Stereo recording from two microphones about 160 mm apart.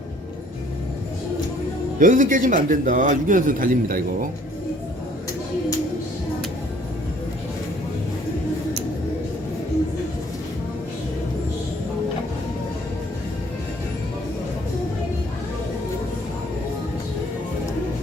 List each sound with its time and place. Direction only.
2.0 s a man's voice: 55° right (ahead or behind)